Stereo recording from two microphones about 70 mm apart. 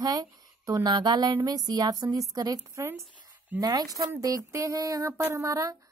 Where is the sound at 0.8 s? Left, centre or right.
Right.